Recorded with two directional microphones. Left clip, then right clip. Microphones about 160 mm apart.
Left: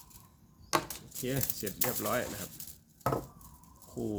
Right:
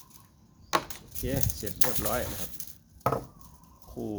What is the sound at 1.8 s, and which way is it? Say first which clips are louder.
Speech: right 3 dB; 25° right (ahead or behind).